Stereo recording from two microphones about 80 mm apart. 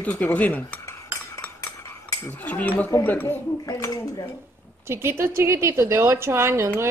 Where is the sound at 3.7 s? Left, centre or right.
Left.